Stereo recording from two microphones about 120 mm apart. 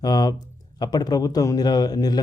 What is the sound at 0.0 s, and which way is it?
Speech, 35° left (ahead or behind).